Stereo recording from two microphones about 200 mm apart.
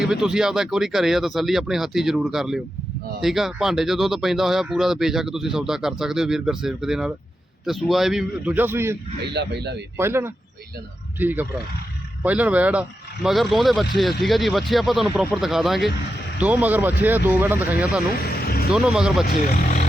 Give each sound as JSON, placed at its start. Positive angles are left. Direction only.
{"t": 0.0, "sound": "speech", "side_deg": 0}
{"t": 9.2, "sound": "speech", "side_deg": -55}
{"t": 10.0, "sound": "speech", "side_deg": -10}